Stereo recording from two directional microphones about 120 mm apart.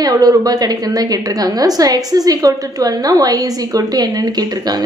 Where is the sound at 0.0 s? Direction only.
30° right (ahead or behind).